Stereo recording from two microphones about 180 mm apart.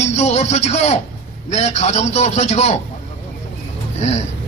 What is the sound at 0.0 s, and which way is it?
Music, 40° left (ahead or behind).